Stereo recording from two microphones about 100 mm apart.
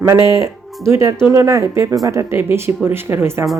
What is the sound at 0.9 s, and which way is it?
A woman's voice, 35° right (ahead or behind).